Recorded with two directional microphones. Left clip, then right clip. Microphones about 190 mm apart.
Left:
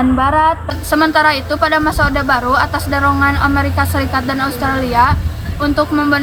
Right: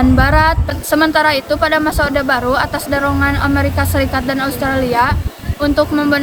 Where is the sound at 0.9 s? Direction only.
30° right (ahead or behind).